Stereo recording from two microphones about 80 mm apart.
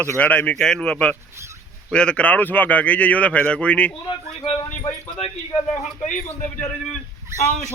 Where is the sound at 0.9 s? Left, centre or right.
Centre.